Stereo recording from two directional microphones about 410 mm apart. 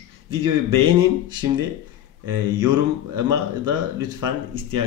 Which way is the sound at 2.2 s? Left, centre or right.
Centre.